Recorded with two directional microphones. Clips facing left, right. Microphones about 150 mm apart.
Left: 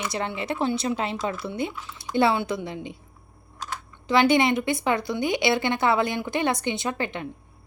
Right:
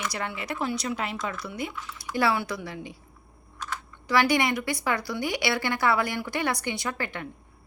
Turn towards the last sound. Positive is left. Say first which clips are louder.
# left 4 dB
turn(degrees=20)  # may be behind; listen again after turning